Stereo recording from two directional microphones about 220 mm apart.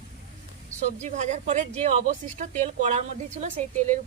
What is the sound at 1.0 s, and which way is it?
A woman's voice, 35° right (ahead or behind).